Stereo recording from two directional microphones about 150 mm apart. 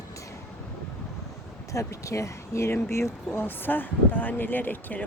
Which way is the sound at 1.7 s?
20° left (ahead or behind).